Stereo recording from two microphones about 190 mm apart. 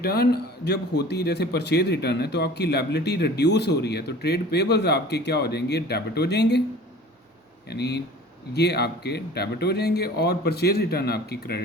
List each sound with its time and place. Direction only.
0.0 s a man's voice: 55° left (ahead or behind)
7.7 s a man's voice: 60° left (ahead or behind)